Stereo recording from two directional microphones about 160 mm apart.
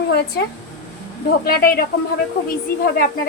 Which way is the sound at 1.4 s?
70° left (ahead or behind).